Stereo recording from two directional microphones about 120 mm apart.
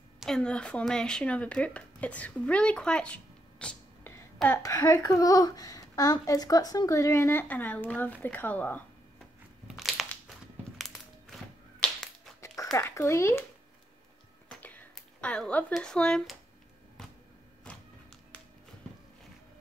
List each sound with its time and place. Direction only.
0.2 s speech: 5° left (ahead or behind)
4.5 s speech: 25° left (ahead or behind)
9.7 s crumpling: centre (ahead or behind)
10.8 s music: centre (ahead or behind)
11.8 s finger snapping: 5° left (ahead or behind)
12.7 s speech: 25° left (ahead or behind)
14.6 s speech: 15° left (ahead or behind)
17.7 s music: 10° left (ahead or behind)